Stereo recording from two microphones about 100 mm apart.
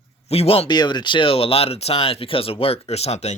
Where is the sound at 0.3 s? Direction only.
80° left.